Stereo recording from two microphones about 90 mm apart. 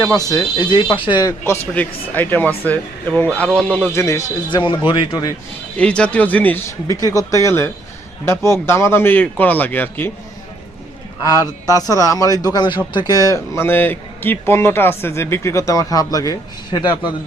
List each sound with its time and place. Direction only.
0.0 s speech: 40° left (ahead or behind)
0.7 s speech: 70° left (ahead or behind)
1.7 s a man's voice: 20° left (ahead or behind)
3.9 s speech: 35° left (ahead or behind)
4.4 s speech: 60° left (ahead or behind)
5.7 s speech: 10° left (ahead or behind)
6.7 s a man's voice: 40° left (ahead or behind); by 10.1 s 20° left (ahead or behind)
11.2 s a man's voice: 40° left (ahead or behind); by 13.1 s 60° left (ahead or behind)
13.1 s speech: 40° left (ahead or behind)
13.7 s a man's voice: 20° left (ahead or behind); by 16.8 s 40° left (ahead or behind)